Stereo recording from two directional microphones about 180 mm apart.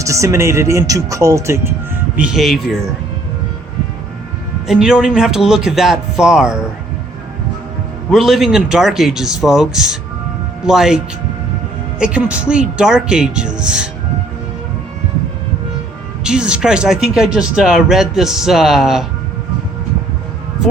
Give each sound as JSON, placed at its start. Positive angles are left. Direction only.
{"t": 0.0, "sound": "speech", "side_deg": -15}
{"t": 2.1, "sound": "speech", "side_deg": -5}
{"t": 4.6, "sound": "speech", "side_deg": -5}
{"t": 8.1, "sound": "speech", "side_deg": 0}
{"t": 16.2, "sound": "speech", "side_deg": -5}